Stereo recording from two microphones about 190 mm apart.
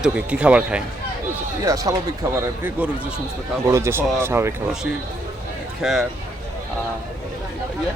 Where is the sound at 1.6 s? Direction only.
15° right (ahead or behind).